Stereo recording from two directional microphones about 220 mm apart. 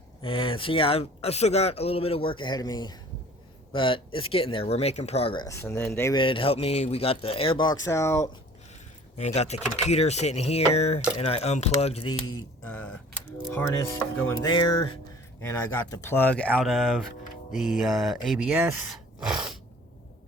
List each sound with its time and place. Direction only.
0.2 s speech: 25° left (ahead or behind)
9.1 s speech: 30° left (ahead or behind)
12.6 s speech: 5° left (ahead or behind)